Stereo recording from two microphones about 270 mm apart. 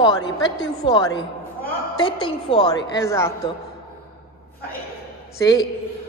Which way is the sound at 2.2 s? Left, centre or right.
Centre.